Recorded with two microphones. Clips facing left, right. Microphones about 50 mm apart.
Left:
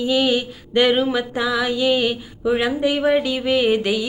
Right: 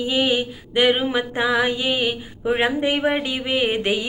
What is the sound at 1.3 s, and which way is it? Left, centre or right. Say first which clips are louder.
Music: right 1 dB; right.